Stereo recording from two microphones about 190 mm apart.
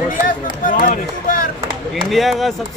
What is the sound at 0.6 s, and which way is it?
Speech, 45° left (ahead or behind).